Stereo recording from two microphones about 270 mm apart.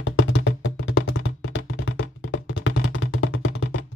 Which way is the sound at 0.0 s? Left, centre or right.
Left.